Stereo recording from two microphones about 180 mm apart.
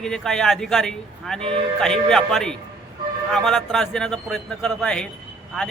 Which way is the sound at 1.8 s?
5° left (ahead or behind).